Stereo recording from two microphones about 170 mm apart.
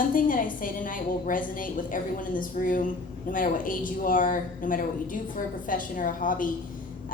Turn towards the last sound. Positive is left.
turn(degrees=55)  # may be behind; listen again after turning